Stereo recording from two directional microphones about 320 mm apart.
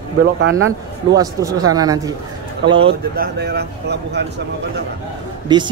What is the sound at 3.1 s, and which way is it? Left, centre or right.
Speech, right.